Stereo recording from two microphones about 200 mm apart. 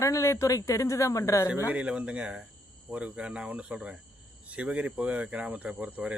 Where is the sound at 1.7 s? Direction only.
5° right (ahead or behind).